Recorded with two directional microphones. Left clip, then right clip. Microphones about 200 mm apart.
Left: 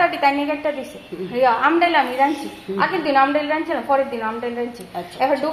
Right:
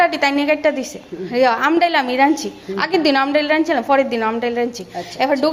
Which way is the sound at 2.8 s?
50° right (ahead or behind).